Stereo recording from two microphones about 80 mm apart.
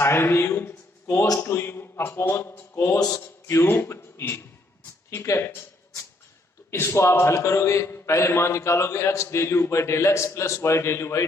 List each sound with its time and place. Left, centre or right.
0.0 s a man's voice: left
6.7 s a man's voice: left